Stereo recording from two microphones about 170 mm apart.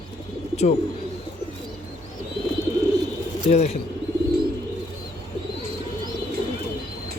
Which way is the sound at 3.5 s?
40° left (ahead or behind).